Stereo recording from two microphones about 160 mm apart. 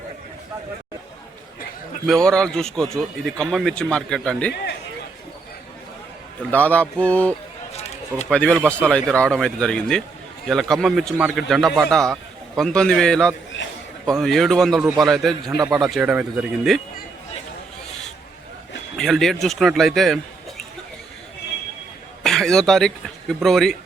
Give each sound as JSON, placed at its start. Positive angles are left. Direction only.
{"t": 2.0, "sound": "speech", "side_deg": 5}
{"t": 6.5, "sound": "a sound", "side_deg": 10}
{"t": 7.7, "sound": "a sound", "side_deg": 40}
{"t": 8.3, "sound": "speech", "side_deg": 5}
{"t": 18.9, "sound": "speech", "side_deg": 0}
{"t": 22.2, "sound": "speech", "side_deg": 0}